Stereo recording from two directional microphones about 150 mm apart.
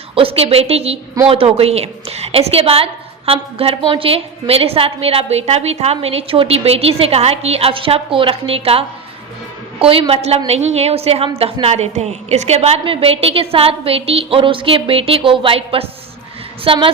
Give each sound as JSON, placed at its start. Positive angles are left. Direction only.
{"t": 0.1, "sound": "a woman's voice", "side_deg": -40}
{"t": 9.8, "sound": "a woman's voice", "side_deg": -40}